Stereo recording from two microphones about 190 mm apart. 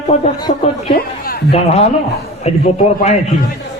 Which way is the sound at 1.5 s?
30° left (ahead or behind).